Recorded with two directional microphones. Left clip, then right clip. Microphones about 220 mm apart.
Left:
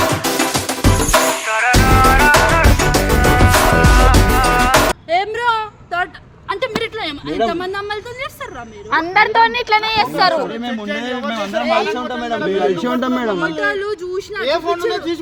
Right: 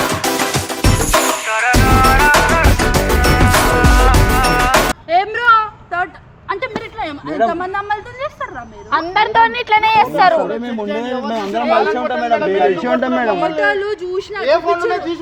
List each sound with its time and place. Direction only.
0.8 s music: centre (ahead or behind)
5.0 s a sound: 40° left (ahead or behind)
8.9 s a woman's voice: 10° right (ahead or behind)
9.5 s speech: 10° left (ahead or behind)
10.5 s a man's voice: 35° left (ahead or behind)
11.6 s a man's voice: 45° left (ahead or behind)